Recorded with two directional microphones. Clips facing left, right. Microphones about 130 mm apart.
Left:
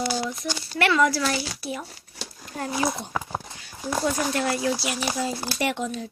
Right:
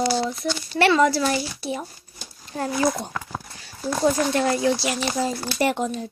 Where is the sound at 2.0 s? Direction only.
75° left (ahead or behind).